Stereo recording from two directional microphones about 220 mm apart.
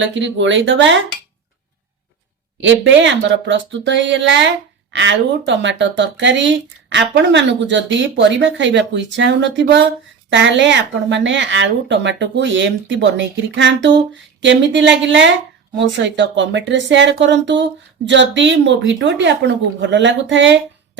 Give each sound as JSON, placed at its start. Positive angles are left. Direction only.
{"t": 0.0, "sound": "speech", "side_deg": -55}
{"t": 2.6, "sound": "speech", "side_deg": -55}
{"t": 16.0, "sound": "speech", "side_deg": -55}